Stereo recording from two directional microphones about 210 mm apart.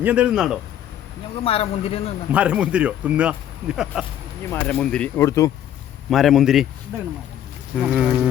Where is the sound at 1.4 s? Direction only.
25° left (ahead or behind).